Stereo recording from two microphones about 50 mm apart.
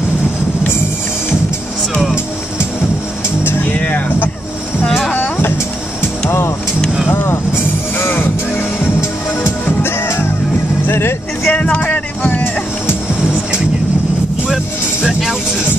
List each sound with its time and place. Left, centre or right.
3.4 s music: left
7.2 s music: left
10.9 s vehicle: left
11.4 s music: left
14.5 s music: centre